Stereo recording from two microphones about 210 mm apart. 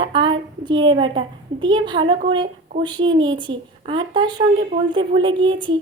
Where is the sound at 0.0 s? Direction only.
20° right (ahead or behind).